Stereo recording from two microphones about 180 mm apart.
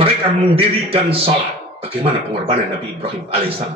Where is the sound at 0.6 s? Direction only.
30° right (ahead or behind).